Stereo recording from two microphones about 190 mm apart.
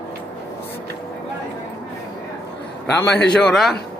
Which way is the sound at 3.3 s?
Centre (ahead or behind).